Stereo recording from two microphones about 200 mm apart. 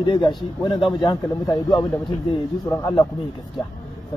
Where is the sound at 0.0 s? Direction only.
20° left (ahead or behind).